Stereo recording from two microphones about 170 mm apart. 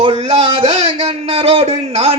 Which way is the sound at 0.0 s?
35° right (ahead or behind).